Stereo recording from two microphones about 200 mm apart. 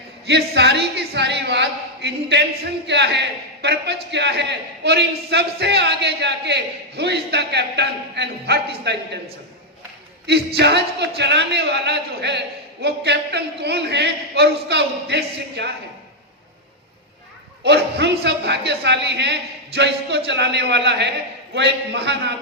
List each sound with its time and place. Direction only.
0.3 s a woman's voice: 60° right (ahead or behind)
10.2 s a woman's voice: 55° right (ahead or behind)
17.6 s a woman's voice: 60° right (ahead or behind)